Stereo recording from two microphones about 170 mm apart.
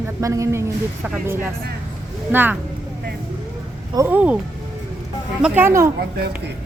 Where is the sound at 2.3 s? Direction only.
10° right (ahead or behind).